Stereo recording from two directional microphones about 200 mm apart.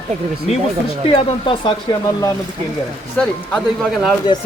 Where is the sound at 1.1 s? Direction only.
25° left (ahead or behind).